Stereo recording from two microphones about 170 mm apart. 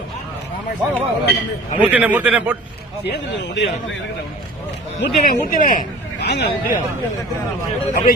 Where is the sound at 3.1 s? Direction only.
90° left.